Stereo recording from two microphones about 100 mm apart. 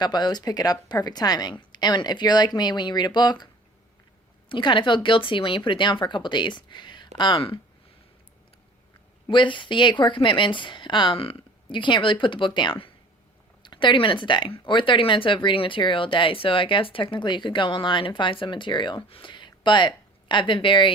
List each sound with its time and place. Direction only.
0.0 s a woman's voice: 45° left (ahead or behind)
9.2 s a woman's voice: 55° left (ahead or behind)
11.2 s speech: 65° left (ahead or behind)